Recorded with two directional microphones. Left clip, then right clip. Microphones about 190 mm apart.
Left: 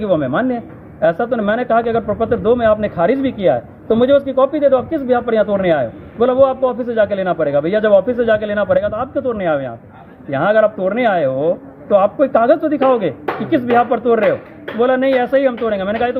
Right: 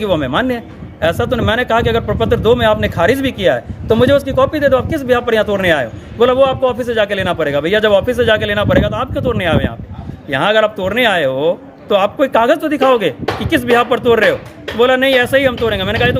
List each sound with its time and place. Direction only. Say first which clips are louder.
0.0 s a man's voice: right 1 dB; 45° right (ahead or behind)
4.9 s a man's voice: right 2 dB; 45° right (ahead or behind)